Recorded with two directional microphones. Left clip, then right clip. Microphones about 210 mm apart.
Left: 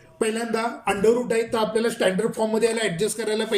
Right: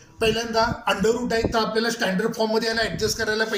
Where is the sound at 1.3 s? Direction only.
20° left (ahead or behind).